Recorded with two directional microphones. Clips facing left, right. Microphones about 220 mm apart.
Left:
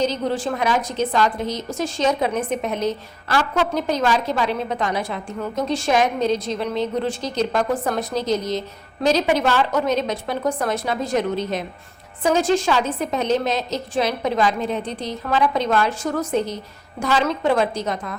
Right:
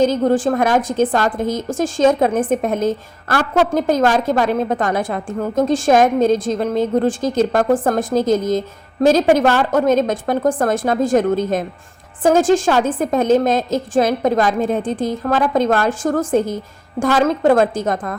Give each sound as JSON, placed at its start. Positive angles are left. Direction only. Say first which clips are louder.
{"t": 0.0, "sound": "a woman's voice", "louder": "right 7 dB", "side_deg": -50}